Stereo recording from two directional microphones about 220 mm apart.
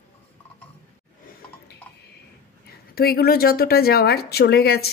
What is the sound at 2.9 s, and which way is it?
Speech, 45° left (ahead or behind).